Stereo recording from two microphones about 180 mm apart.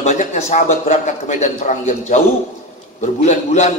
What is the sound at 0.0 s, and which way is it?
A man's voice, 40° left (ahead or behind).